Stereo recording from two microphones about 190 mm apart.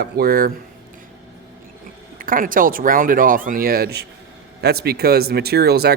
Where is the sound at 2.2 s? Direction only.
45° right (ahead or behind).